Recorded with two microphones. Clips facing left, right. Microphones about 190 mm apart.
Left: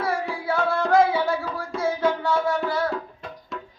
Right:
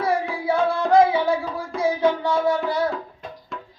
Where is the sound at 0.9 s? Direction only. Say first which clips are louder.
Right 3 dB; 15° right (ahead or behind).